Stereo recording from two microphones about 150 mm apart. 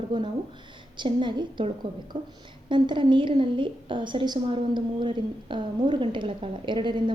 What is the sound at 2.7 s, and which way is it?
A woman's voice, 30° right (ahead or behind).